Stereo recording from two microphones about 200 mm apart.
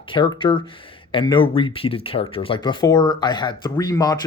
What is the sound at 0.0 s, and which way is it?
Speech, 25° left (ahead or behind).